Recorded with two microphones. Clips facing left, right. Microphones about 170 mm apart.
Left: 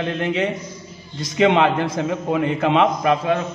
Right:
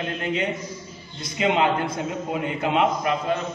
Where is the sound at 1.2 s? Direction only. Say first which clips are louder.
Left 6 dB; 90° left.